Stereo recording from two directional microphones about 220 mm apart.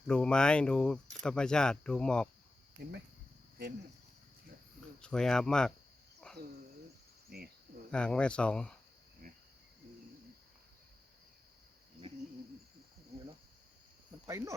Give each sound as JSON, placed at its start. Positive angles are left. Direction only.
{"t": 0.1, "sound": "speech", "side_deg": 5}
{"t": 4.9, "sound": "speech", "side_deg": 5}
{"t": 6.2, "sound": "cricket", "side_deg": 5}
{"t": 7.3, "sound": "speech", "side_deg": -45}
{"t": 7.9, "sound": "speech", "side_deg": 5}
{"t": 14.3, "sound": "speech", "side_deg": -15}